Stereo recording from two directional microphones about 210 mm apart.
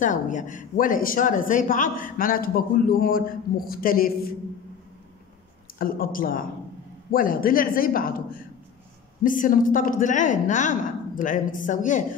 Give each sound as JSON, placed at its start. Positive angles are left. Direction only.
{"t": 0.0, "sound": "a man's voice", "side_deg": 35}
{"t": 5.8, "sound": "a man's voice", "side_deg": 45}